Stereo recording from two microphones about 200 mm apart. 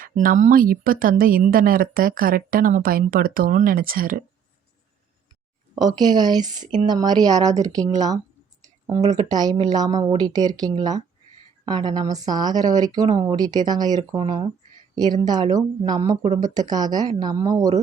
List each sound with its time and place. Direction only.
0.0 s speech: 45° right (ahead or behind)
5.7 s speech: 20° right (ahead or behind)
9.3 s speech: 20° right (ahead or behind)